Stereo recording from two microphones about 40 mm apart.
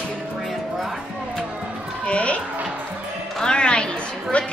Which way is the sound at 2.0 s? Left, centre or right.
Left.